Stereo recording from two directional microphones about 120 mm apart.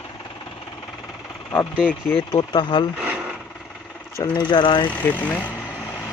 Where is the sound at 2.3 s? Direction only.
40° left (ahead or behind).